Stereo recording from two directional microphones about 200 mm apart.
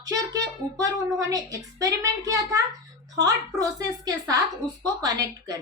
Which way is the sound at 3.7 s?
15° right (ahead or behind).